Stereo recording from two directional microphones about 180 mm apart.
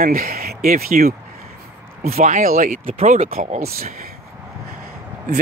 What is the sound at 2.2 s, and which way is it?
Speech, 45° right (ahead or behind).